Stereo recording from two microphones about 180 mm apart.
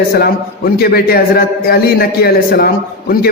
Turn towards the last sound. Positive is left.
turn(degrees=60)  # may be behind; listen again after turning